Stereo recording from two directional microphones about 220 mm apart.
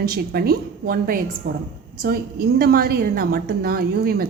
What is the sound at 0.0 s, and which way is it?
A woman's voice, 45° right (ahead or behind).